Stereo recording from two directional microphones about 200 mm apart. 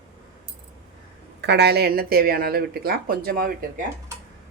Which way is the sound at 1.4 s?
55° right (ahead or behind).